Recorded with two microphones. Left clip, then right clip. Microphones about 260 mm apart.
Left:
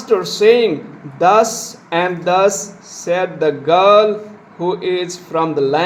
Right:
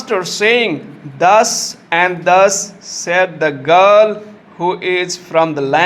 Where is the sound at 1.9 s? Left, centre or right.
Right.